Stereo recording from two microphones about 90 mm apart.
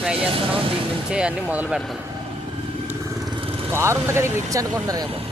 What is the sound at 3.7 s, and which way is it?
Speech, 30° right (ahead or behind).